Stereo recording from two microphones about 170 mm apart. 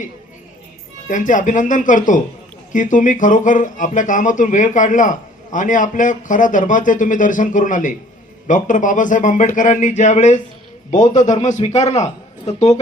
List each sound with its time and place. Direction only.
1.0 s speech: 50° left (ahead or behind)